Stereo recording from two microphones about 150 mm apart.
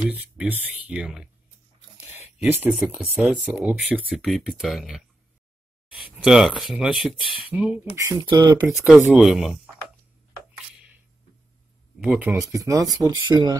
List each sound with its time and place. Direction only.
0.1 s speech: 10° right (ahead or behind)
2.4 s speech: 10° right (ahead or behind)
4.1 s speech: centre (ahead or behind)
7.2 s speech: 35° left (ahead or behind)
7.4 s speech: 5° right (ahead or behind)
7.9 s speech: 20° right (ahead or behind)
8.6 s speech: centre (ahead or behind)
12.0 s speech: 10° right (ahead or behind); by 13.6 s 30° right (ahead or behind)